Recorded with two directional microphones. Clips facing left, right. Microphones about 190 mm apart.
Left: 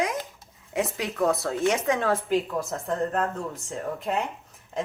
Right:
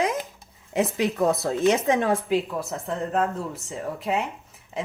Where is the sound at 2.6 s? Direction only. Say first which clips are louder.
Left 1 dB; centre (ahead or behind).